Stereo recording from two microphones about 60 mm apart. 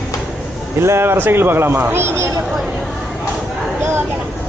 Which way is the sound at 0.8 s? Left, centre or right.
Right.